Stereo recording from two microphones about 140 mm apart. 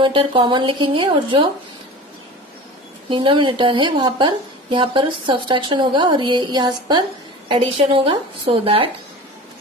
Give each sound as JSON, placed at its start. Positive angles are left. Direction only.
{"t": 0.0, "sound": "a woman's voice", "side_deg": -35}
{"t": 3.1, "sound": "a woman's voice", "side_deg": -35}